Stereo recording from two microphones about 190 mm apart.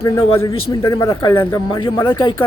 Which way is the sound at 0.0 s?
15° left (ahead or behind).